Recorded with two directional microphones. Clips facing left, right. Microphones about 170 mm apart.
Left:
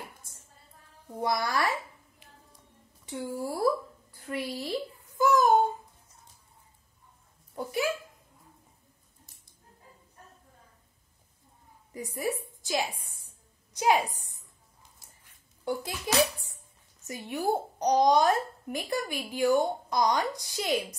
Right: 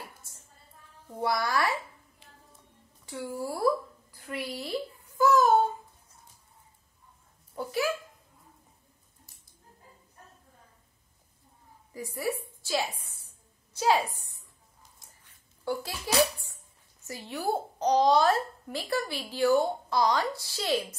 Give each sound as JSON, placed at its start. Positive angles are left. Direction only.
{"t": 1.2, "sound": "speech", "side_deg": 20}
{"t": 3.1, "sound": "speech", "side_deg": 30}
{"t": 4.1, "sound": "a sound", "side_deg": 25}
{"t": 7.5, "sound": "speech", "side_deg": 20}
{"t": 11.9, "sound": "a woman's voice", "side_deg": 15}
{"t": 15.6, "sound": "a child's voice", "side_deg": 20}
{"t": 17.0, "sound": "a child's voice", "side_deg": 15}